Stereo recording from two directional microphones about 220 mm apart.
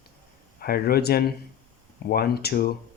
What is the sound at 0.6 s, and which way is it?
Speech, 45° left (ahead or behind).